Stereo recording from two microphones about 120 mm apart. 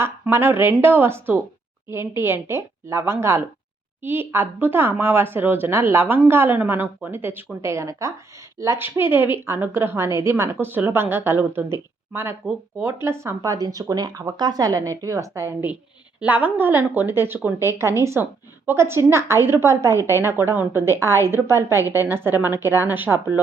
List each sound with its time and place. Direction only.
0.0 s a woman's voice: 20° right (ahead or behind)
16.2 s a woman's voice: 15° right (ahead or behind)